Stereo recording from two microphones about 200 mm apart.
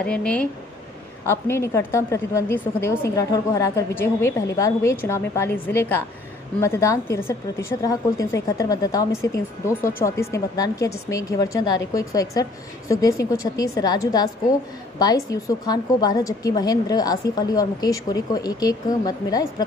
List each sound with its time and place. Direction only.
0.0 s a woman's voice: 5° left (ahead or behind)